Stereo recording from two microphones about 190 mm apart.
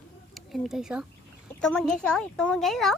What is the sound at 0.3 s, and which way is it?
A child's voice, centre (ahead or behind).